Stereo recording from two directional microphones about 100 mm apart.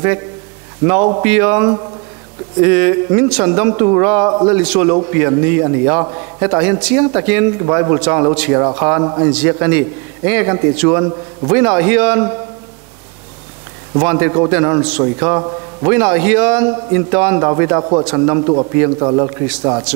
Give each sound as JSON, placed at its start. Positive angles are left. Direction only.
{"t": 0.8, "sound": "a man's voice", "side_deg": -20}
{"t": 4.6, "sound": "a man's voice", "side_deg": -15}
{"t": 13.9, "sound": "a man's voice", "side_deg": -20}